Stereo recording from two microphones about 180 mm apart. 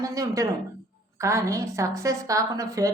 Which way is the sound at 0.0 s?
20° right (ahead or behind).